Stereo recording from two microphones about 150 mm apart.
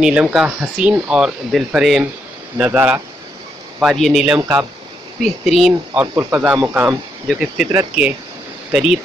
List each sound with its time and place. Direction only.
0.0 s speech: 5° right (ahead or behind)
3.8 s speech: centre (ahead or behind)
4.4 s speech: 20° right (ahead or behind)
5.2 s speech: centre (ahead or behind)
6.1 s speech: 15° right (ahead or behind)
7.2 s speech: centre (ahead or behind)